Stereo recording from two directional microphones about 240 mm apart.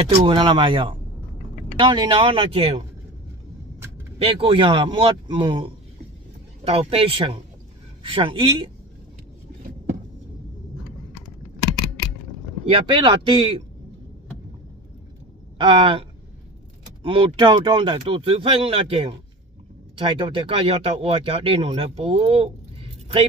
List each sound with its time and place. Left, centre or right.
0.2 s speech: centre
4.2 s speech: right
12.6 s speech: right
15.5 s a sound: right
17.0 s speech: right